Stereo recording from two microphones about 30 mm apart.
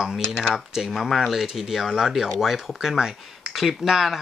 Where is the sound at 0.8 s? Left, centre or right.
Centre.